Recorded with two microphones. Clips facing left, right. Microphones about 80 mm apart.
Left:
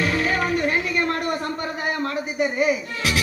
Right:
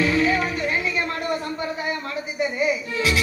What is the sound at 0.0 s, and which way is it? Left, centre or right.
Music, left.